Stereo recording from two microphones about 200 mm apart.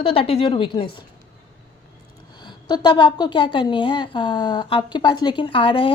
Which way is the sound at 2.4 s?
20° left (ahead or behind).